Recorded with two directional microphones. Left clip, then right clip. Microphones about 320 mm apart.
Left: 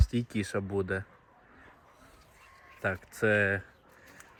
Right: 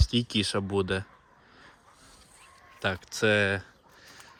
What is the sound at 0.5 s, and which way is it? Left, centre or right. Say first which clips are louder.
Speech: right 3 dB; centre.